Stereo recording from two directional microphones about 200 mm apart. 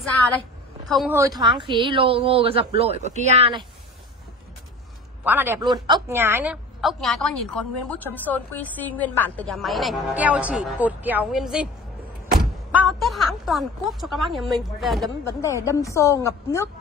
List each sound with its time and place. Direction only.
0.8 s a woman's voice: centre (ahead or behind)
1.4 s a woman's voice: 25° right (ahead or behind)
5.2 s a woman's voice: 10° right (ahead or behind)
12.7 s a woman's voice: centre (ahead or behind)
15.6 s a woman's voice: 15° left (ahead or behind)